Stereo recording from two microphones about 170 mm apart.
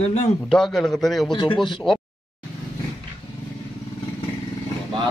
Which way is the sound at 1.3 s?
30° left (ahead or behind).